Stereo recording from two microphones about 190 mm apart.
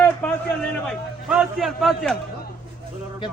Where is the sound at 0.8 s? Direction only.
Centre (ahead or behind).